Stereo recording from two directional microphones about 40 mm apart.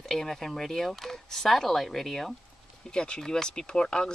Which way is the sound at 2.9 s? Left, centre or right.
Left.